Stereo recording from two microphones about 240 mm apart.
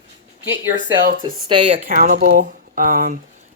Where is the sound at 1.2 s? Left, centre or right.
Right.